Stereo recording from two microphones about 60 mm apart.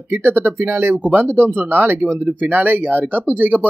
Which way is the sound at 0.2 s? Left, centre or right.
Right.